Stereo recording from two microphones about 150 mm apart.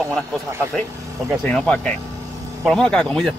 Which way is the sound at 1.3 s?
5° left (ahead or behind).